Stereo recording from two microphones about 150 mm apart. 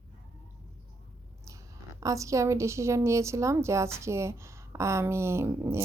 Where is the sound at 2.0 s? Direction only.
20° right (ahead or behind).